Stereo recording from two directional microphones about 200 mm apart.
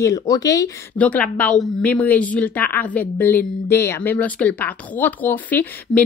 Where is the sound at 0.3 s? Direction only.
15° left (ahead or behind).